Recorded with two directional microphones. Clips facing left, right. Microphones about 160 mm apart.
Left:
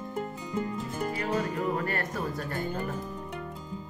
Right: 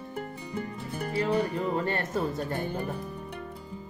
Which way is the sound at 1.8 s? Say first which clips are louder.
Right 3 dB; 25° right (ahead or behind).